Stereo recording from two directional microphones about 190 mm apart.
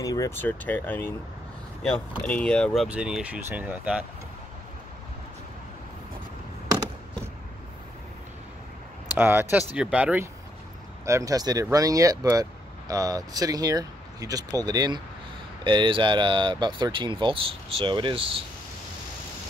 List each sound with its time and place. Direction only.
0.0 s speech: 20° left (ahead or behind); by 4.0 s 5° right (ahead or behind)
9.1 s speech: 10° right (ahead or behind)
11.1 s speech: 15° right (ahead or behind)